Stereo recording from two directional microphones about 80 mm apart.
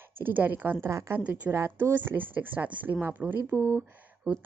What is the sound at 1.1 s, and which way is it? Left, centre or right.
A woman's voice, centre.